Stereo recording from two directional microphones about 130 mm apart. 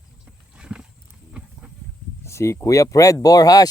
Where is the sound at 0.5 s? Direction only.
5° right (ahead or behind).